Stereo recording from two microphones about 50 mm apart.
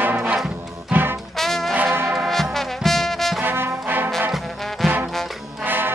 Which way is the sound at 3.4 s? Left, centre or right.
Right.